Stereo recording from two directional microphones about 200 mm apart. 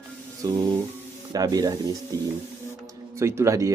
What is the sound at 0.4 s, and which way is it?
Speech, 20° right (ahead or behind).